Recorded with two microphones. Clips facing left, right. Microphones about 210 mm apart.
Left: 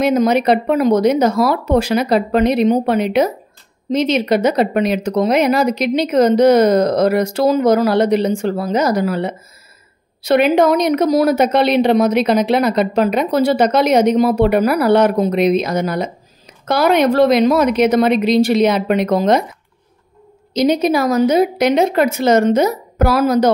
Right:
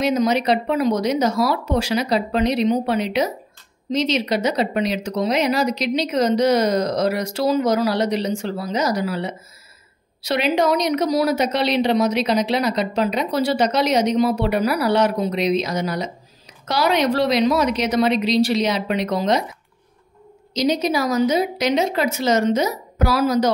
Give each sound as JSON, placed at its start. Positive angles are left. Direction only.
{"t": 0.0, "sound": "a woman's voice", "side_deg": 55}
{"t": 20.5, "sound": "speech", "side_deg": 55}